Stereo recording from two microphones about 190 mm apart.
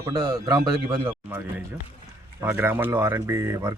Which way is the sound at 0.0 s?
15° right (ahead or behind).